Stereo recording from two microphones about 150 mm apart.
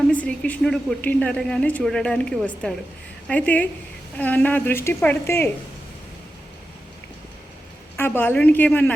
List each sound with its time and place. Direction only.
0.1 s a woman's voice: 10° left (ahead or behind)
7.9 s a woman's voice: 15° left (ahead or behind)